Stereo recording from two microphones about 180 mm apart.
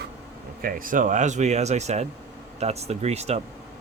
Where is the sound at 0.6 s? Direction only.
50° right (ahead or behind).